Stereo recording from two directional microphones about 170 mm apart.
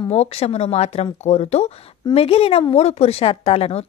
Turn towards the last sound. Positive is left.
turn(degrees=35)  # may be behind; listen again after turning